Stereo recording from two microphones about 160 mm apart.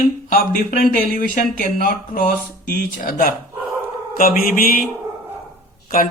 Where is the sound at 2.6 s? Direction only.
65° right (ahead or behind).